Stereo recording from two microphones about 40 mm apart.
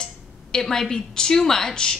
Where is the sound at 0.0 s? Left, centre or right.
Centre.